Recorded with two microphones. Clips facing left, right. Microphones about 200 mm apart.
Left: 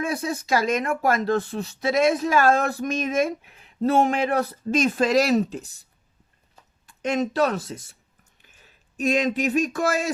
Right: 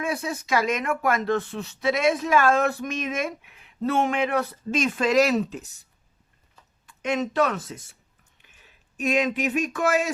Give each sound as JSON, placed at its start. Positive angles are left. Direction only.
{"t": 0.0, "sound": "speech", "side_deg": 35}
{"t": 6.8, "sound": "speech", "side_deg": 35}
{"t": 9.0, "sound": "speech", "side_deg": 35}